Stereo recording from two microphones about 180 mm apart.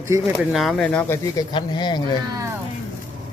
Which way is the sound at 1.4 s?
25° left (ahead or behind).